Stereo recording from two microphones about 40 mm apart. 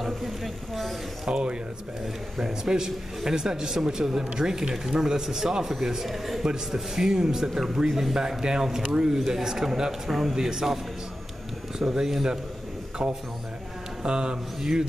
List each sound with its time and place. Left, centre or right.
0.0 s a sound: centre
1.2 s speech: right
2.6 s speech: centre
6.4 s speech: centre
10.0 s a man's voice: centre
10.3 s speech: centre
11.8 s speech: centre
13.0 s speech: right